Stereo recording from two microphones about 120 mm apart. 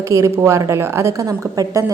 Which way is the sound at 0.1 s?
25° right (ahead or behind).